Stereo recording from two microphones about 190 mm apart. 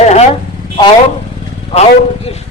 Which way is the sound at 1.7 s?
35° left (ahead or behind).